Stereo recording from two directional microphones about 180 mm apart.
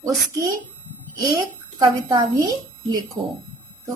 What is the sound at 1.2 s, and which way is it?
A woman's voice, 20° right (ahead or behind).